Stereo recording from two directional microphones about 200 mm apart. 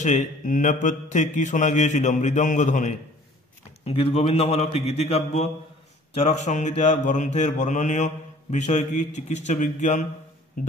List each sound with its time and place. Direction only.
0.0 s mantra: 35° left (ahead or behind)